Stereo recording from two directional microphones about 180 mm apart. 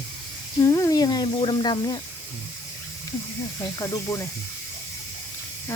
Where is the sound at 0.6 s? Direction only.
15° left (ahead or behind).